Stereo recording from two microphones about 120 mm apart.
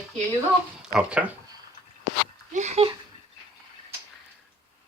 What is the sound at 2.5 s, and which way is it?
Speech, 70° right (ahead or behind).